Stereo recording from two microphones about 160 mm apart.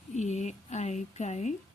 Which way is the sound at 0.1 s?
45° left (ahead or behind).